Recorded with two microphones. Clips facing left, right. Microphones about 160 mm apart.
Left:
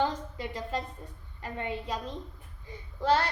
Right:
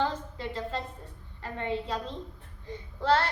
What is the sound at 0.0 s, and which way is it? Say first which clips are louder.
A woman's voice: even; 15° left (ahead or behind).